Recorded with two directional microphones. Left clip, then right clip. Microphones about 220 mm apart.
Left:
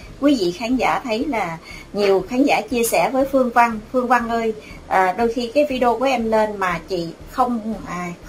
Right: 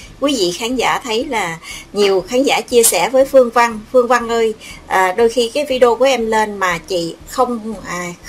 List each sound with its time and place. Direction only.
0.2 s a woman's voice: 35° right (ahead or behind)